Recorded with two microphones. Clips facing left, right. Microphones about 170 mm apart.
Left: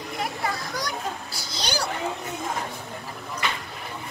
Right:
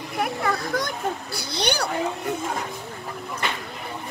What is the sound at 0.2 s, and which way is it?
Children playing, 55° right (ahead or behind).